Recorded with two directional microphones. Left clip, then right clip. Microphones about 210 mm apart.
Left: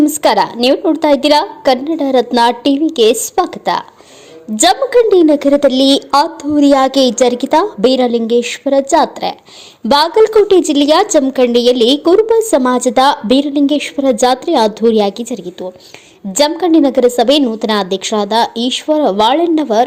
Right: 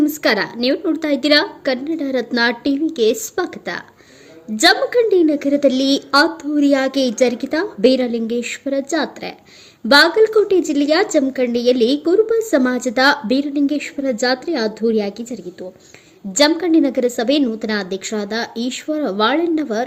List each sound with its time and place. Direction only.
0.0 s a woman's voice: centre (ahead or behind)